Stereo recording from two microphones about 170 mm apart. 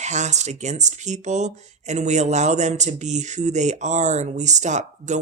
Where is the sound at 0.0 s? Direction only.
40° right (ahead or behind).